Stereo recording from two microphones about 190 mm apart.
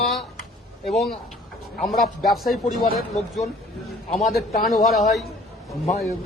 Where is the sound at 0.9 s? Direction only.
Centre (ahead or behind).